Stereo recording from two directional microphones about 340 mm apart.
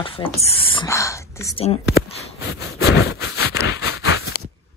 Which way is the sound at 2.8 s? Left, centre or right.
Left.